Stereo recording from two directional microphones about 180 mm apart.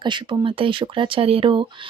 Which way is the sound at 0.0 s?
25° right (ahead or behind).